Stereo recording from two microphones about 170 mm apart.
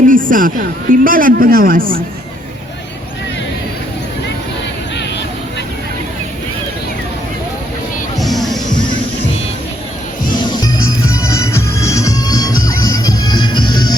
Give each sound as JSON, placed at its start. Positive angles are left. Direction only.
{"t": 0.1, "sound": "a woman's voice", "side_deg": -55}
{"t": 8.2, "sound": "music", "side_deg": 0}
{"t": 10.3, "sound": "music", "side_deg": 25}